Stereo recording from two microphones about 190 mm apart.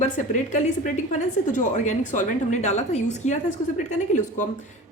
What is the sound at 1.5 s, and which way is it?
A woman's voice, 40° left (ahead or behind).